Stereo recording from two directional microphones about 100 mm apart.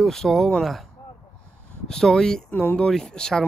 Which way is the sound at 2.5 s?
20° left (ahead or behind).